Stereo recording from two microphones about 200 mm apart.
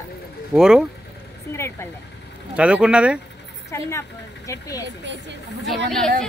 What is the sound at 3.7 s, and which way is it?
Speech, 15° left (ahead or behind).